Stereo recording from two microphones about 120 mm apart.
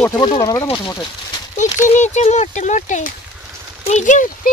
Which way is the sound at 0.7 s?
40° left (ahead or behind).